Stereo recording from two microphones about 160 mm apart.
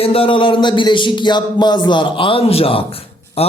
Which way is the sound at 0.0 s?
35° left (ahead or behind).